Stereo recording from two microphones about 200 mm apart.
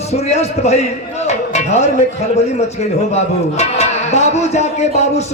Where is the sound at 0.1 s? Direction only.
35° left (ahead or behind).